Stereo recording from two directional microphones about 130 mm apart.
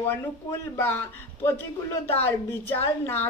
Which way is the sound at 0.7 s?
15° left (ahead or behind).